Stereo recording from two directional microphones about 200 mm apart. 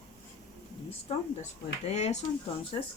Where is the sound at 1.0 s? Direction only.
35° left (ahead or behind).